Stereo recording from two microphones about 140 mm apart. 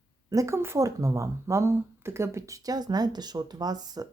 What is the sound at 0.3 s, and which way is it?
Speech, 20° right (ahead or behind).